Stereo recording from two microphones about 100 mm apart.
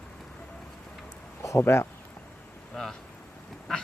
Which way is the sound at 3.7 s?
5° left (ahead or behind).